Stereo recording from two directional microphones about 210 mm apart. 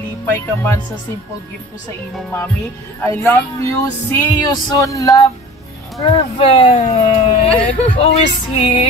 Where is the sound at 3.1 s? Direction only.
15° left (ahead or behind); by 8.1 s 30° left (ahead or behind).